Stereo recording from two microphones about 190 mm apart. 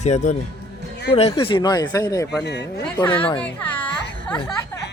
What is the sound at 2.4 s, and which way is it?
Speech, 65° left (ahead or behind).